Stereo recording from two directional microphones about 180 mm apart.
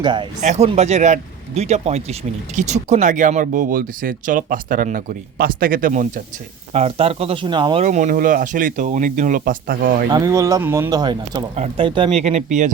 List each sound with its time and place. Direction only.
0.0 s speech: 25° right (ahead or behind)
0.4 s speech: 40° right (ahead or behind)
6.7 s speech: 35° right (ahead or behind)
7.9 s speech: 45° right (ahead or behind)
10.1 s speech: 20° right (ahead or behind); by 12.7 s 40° right (ahead or behind)